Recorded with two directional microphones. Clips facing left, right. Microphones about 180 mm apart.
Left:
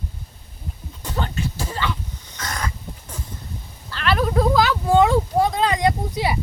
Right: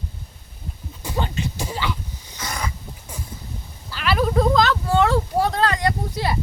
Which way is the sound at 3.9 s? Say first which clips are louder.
Even; 5° right (ahead or behind).